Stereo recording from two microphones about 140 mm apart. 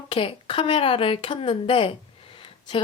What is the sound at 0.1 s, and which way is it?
Speech, 40° left (ahead or behind).